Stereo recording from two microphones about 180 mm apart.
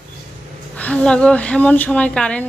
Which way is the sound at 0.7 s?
5° left (ahead or behind).